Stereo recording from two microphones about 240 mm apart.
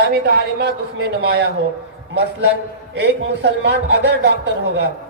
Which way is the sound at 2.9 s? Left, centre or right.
Right.